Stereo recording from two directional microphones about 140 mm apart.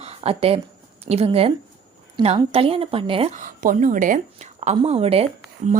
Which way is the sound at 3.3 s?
70° right (ahead or behind).